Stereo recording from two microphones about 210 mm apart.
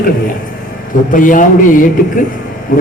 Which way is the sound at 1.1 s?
40° left (ahead or behind).